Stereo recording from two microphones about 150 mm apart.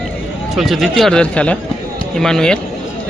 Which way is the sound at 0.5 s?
Centre (ahead or behind).